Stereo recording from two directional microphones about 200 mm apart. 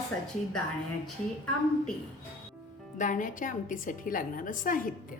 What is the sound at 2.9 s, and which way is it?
A woman's voice, 40° left (ahead or behind).